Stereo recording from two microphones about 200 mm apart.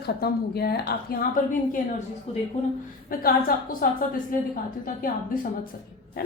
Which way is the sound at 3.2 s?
45° left (ahead or behind).